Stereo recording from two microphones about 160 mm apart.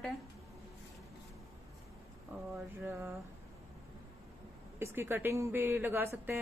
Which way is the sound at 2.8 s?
15° right (ahead or behind).